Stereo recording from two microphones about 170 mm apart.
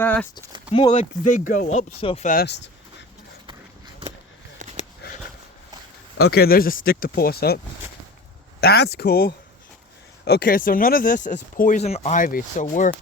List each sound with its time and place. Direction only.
0.0 s speech: 10° left (ahead or behind)
0.7 s speech: 30° left (ahead or behind)
1.5 s speech: 55° left (ahead or behind)
1.7 s speech: 35° left (ahead or behind)
2.2 s speech: 60° left (ahead or behind)
6.2 s speech: 65° left (ahead or behind)
8.6 s speech: 70° left (ahead or behind); by 13.0 s 50° left (ahead or behind)